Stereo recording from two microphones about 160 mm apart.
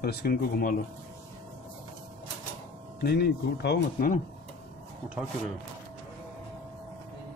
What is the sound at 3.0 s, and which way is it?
Speech, 85° left.